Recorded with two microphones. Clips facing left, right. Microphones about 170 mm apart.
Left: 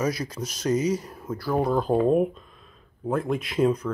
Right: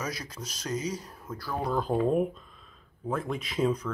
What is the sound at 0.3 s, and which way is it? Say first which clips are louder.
Speech: left 9 dB; 5° left (ahead or behind).